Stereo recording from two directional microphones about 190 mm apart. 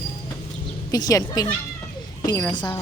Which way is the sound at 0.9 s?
20° left (ahead or behind).